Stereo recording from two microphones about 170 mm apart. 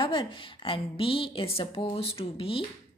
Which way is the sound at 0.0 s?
30° left (ahead or behind).